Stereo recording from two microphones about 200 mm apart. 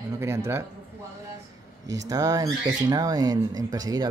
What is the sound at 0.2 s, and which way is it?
Speech, 10° right (ahead or behind).